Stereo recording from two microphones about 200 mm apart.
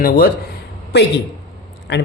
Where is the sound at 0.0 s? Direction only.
45° left (ahead or behind).